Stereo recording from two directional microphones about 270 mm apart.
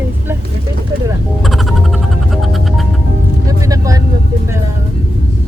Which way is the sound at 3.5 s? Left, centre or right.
Centre.